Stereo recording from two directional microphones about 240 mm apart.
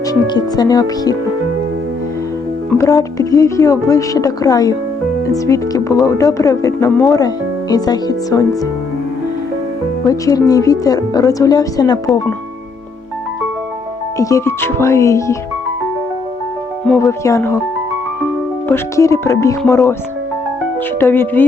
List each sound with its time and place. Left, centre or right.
0.1 s speech: centre
2.6 s speech: centre
10.1 s speech: centre
14.2 s speech: centre
17.0 s speech: centre
18.7 s speech: centre
21.0 s speech: centre